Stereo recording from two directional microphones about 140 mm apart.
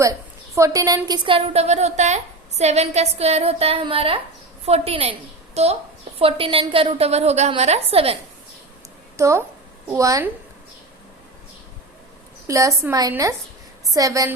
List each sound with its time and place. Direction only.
0.0 s a woman's voice: 20° right (ahead or behind); by 8.2 s 45° right (ahead or behind)
9.1 s a woman's voice: 20° right (ahead or behind)
12.5 s a woman's voice: 20° right (ahead or behind)